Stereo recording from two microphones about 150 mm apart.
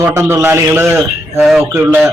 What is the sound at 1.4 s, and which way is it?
Speech, centre (ahead or behind).